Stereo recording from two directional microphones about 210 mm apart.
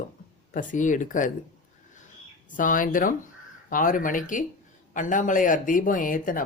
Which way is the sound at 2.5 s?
40° left (ahead or behind).